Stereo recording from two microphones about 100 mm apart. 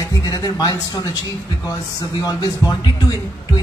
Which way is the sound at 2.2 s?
40° left (ahead or behind).